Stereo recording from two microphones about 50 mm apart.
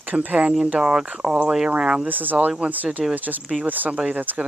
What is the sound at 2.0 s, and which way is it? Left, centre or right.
Speech, right.